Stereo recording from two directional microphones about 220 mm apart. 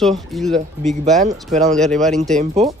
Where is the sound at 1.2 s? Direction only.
35° right (ahead or behind).